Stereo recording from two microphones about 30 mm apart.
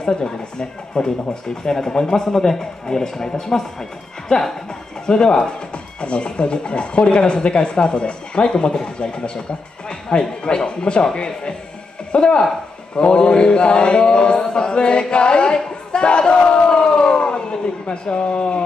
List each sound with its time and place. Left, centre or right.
0.0 s speech: left
5.0 s speech: left
16.2 s a sound: left